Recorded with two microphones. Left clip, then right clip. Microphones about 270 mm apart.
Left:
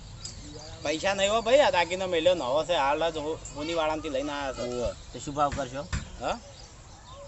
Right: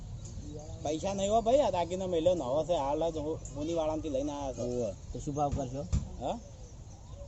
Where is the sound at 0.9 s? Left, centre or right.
Centre.